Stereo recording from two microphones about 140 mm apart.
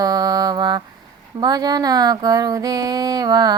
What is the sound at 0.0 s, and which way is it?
Mantra, 25° right (ahead or behind).